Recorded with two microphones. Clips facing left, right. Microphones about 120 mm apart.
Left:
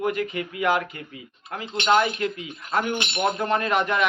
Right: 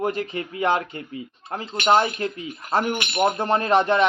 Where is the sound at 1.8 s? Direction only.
30° right (ahead or behind).